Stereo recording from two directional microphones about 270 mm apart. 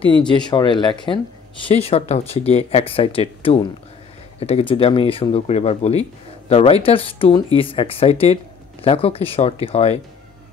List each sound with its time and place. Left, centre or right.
0.5 s speech: centre